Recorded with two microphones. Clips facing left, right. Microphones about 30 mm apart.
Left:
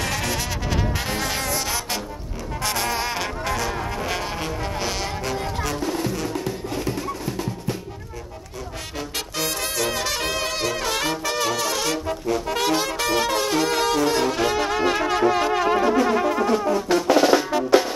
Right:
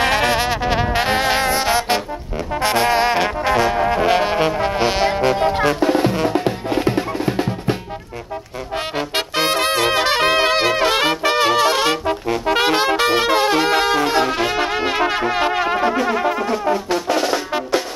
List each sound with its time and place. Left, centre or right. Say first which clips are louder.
0.0 s music: right 9 dB; right
2.6 s brass instrument: right 9 dB; right
8.9 s music: right 7 dB; right; by 16.6 s centre
16.9 s music: left 6 dB; centre